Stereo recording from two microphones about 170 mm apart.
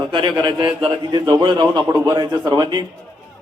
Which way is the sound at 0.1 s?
30° right (ahead or behind).